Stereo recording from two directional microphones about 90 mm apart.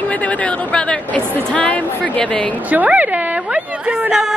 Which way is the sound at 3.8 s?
10° right (ahead or behind).